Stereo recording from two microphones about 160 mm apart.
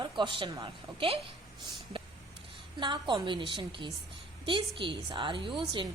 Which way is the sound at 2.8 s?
30° right (ahead or behind).